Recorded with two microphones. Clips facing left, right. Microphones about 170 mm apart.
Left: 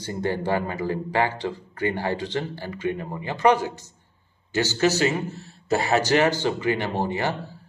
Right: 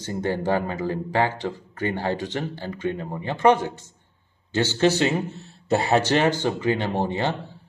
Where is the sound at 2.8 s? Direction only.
10° left (ahead or behind).